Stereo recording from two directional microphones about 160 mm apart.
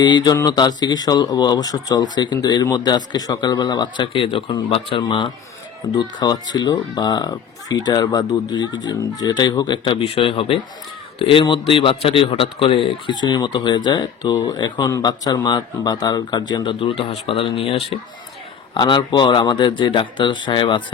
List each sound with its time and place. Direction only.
0.0 s speech: 25° left (ahead or behind)